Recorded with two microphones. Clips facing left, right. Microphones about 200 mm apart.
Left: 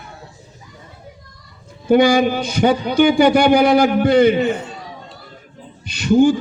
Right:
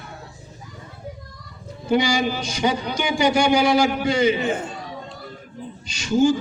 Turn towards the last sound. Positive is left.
turn(degrees=60)  # may be behind; listen again after turning